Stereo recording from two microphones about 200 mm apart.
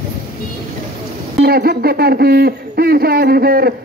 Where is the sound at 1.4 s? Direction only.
50° right (ahead or behind).